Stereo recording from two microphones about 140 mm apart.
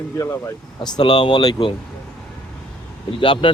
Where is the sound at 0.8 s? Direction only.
35° left (ahead or behind).